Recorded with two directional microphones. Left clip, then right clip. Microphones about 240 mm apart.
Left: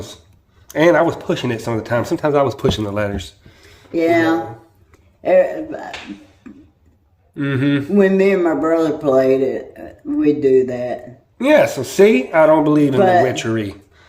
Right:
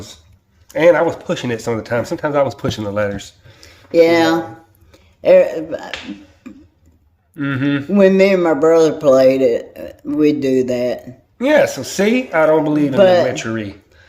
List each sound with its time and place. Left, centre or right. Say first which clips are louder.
0.7 s speech: right 1 dB; centre
3.9 s speech: right 4 dB; right
7.3 s speech: left 1 dB; centre
7.9 s speech: right 3 dB; right
11.3 s speech: even; centre
13.0 s speech: right 4 dB; right
13.2 s speech: left 1 dB; centre